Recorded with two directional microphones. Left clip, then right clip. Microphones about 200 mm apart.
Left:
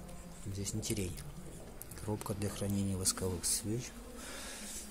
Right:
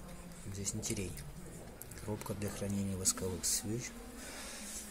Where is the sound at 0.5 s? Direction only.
15° left (ahead or behind).